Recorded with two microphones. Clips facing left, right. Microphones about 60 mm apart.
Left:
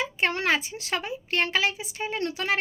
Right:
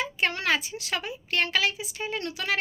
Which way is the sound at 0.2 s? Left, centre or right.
Left.